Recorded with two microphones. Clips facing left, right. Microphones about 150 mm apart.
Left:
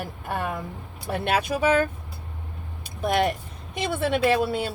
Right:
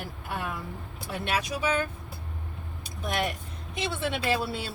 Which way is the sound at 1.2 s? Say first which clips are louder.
Left 6 dB; 55° left (ahead or behind).